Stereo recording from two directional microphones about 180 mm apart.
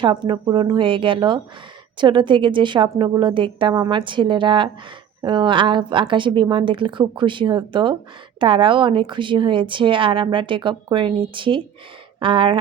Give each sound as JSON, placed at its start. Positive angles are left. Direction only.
{"t": 0.0, "sound": "a woman's voice", "side_deg": -25}